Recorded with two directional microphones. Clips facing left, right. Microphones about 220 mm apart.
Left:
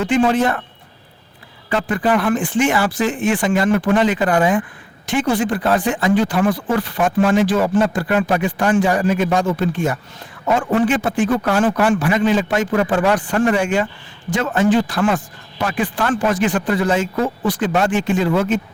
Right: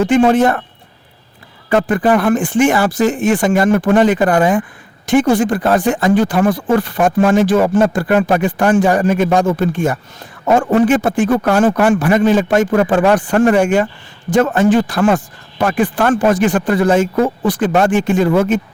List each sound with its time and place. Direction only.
0.0 s speech: 45° right (ahead or behind)
1.7 s speech: 50° right (ahead or behind)